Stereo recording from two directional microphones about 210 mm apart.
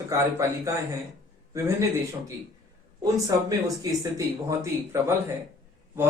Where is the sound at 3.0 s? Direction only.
15° right (ahead or behind).